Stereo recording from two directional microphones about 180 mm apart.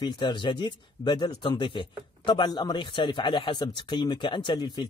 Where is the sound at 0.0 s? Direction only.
25° left (ahead or behind).